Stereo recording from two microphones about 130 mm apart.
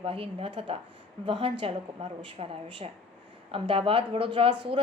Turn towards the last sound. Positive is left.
turn(degrees=-40)  # may be behind; listen again after turning